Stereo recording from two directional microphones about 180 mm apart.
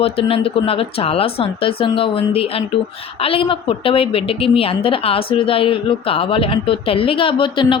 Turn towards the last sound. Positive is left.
turn(degrees=30)  # may be behind; listen again after turning